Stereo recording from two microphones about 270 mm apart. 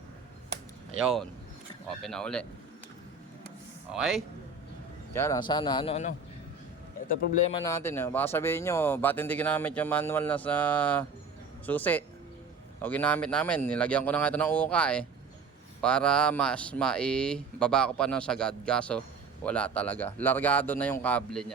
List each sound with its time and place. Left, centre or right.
1.0 s speech: centre
3.9 s speech: centre
5.1 s a man's voice: centre; by 7.5 s left
7.5 s speech: centre